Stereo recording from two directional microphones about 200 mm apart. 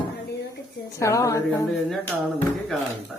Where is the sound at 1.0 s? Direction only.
15° left (ahead or behind).